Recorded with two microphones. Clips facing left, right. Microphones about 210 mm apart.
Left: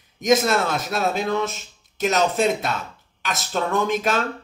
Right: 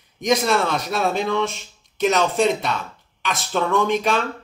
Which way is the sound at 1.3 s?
45° left (ahead or behind).